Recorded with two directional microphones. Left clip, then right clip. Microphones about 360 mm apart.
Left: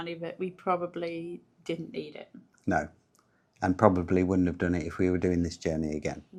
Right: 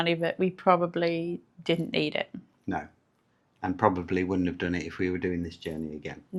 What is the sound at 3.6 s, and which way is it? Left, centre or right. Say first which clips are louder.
Speech: left 2 dB; left.